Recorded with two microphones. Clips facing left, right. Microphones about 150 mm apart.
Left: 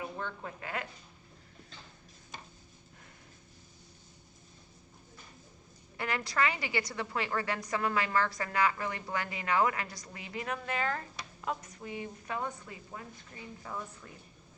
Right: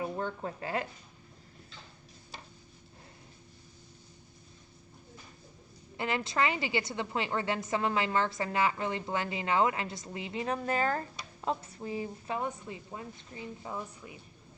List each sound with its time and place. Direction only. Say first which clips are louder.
0.0 s speech: right 5 dB; 40° right (ahead or behind)
6.0 s a woman's voice: right 2 dB; 25° right (ahead or behind)